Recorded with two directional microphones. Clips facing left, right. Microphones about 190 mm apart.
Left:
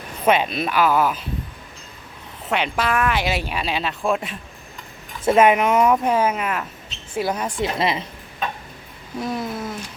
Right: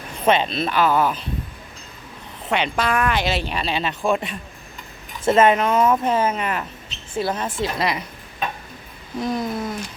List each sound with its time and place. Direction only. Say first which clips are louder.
0.3 s speech: even; 10° left (ahead or behind)
2.5 s speech: even; 5° left (ahead or behind)
5.2 s speech: left 1 dB; 10° left (ahead or behind)
7.6 s speech: left 2 dB; 25° left (ahead or behind)
9.1 s speech: right 2 dB; 5° left (ahead or behind)